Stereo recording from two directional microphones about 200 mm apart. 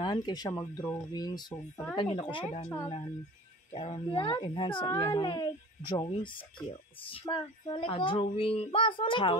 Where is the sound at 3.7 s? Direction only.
30° left (ahead or behind).